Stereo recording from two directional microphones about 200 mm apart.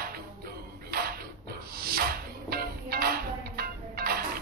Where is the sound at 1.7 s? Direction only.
50° right (ahead or behind).